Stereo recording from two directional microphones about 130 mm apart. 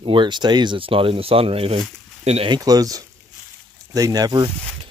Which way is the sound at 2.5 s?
30° right (ahead or behind).